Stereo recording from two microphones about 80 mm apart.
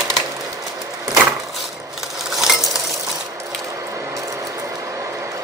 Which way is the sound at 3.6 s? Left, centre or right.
Right.